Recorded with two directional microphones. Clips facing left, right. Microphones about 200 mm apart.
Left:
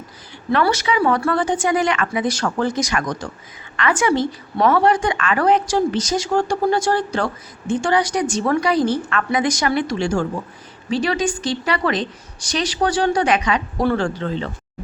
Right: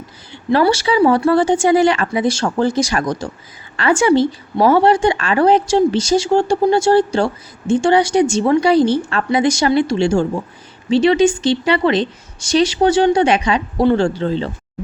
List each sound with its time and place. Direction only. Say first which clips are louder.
0.5 s a woman's voice: right 4 dB; 30° right (ahead or behind)